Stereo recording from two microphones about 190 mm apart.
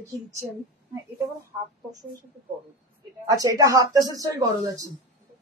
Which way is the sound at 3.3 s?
20° right (ahead or behind).